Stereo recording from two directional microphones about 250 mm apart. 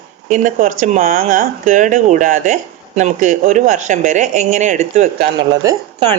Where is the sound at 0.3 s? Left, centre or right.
Right.